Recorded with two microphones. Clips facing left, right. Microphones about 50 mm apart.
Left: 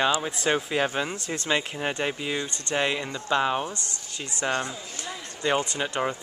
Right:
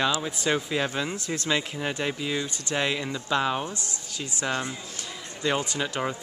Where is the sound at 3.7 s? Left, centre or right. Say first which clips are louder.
Even; left.